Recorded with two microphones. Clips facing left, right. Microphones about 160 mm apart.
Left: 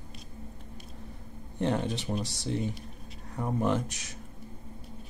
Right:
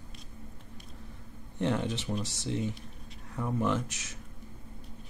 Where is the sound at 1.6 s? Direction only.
35° left (ahead or behind).